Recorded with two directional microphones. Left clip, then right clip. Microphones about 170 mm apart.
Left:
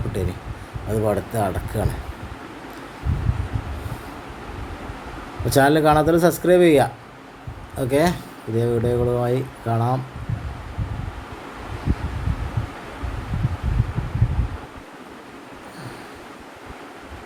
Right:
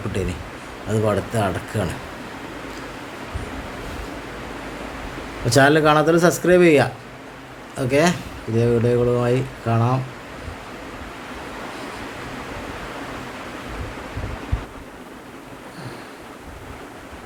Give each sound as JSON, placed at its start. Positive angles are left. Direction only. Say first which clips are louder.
{"t": 0.9, "sound": "speech", "louder": "right 1 dB", "side_deg": 15}
{"t": 5.5, "sound": "speech", "louder": "right 1 dB", "side_deg": 15}